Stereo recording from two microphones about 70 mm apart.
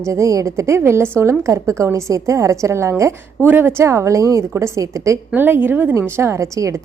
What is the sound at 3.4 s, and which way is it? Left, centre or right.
Speech, right.